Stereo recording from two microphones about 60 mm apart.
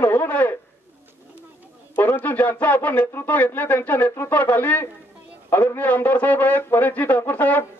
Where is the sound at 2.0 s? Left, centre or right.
Left.